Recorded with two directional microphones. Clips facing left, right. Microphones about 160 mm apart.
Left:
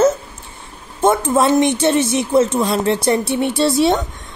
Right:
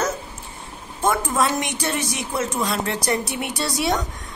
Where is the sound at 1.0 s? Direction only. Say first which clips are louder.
Left 7 dB; 25° left (ahead or behind).